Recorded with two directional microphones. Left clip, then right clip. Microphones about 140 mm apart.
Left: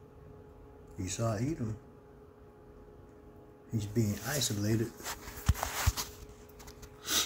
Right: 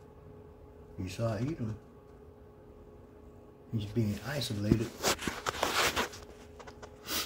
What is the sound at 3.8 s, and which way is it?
Speech, 10° left (ahead or behind).